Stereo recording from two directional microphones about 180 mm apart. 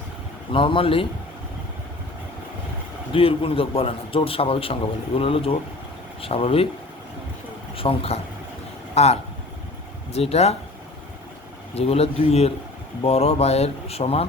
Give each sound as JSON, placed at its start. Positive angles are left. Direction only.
{"t": 0.5, "sound": "a man's voice", "side_deg": 30}
{"t": 3.1, "sound": "a man's voice", "side_deg": 30}
{"t": 7.8, "sound": "a man's voice", "side_deg": 35}
{"t": 11.7, "sound": "a man's voice", "side_deg": 35}